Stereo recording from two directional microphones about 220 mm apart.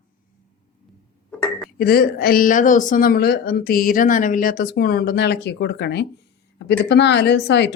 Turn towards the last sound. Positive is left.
turn(degrees=50)  # may be behind; listen again after turning